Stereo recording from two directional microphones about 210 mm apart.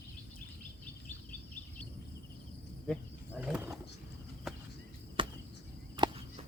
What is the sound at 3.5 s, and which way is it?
Wild animals, 5° right (ahead or behind).